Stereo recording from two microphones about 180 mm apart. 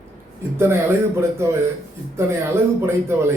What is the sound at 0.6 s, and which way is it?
Speech, 15° right (ahead or behind).